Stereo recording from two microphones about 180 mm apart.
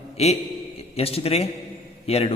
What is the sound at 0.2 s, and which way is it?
A man's voice, 35° left (ahead or behind).